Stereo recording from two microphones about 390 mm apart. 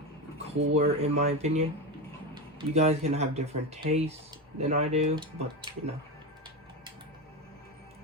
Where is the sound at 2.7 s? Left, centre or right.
Centre.